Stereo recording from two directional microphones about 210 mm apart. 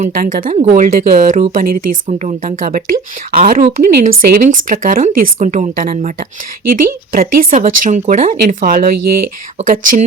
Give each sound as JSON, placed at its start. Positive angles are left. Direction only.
{"t": 0.0, "sound": "speech", "side_deg": -40}